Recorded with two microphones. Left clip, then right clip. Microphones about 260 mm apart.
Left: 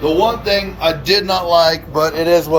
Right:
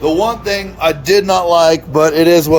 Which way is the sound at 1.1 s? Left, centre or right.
Right.